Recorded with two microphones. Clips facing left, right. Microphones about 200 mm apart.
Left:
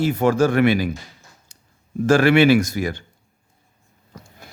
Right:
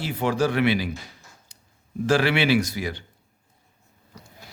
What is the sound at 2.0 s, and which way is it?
Speech, 45° left (ahead or behind).